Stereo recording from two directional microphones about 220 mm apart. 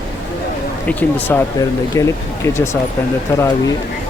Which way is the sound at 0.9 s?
10° left (ahead or behind).